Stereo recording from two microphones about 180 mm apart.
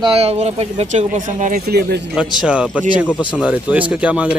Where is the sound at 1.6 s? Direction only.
65° right (ahead or behind).